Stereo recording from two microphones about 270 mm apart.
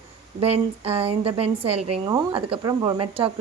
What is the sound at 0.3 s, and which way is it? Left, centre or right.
A woman's voice, right.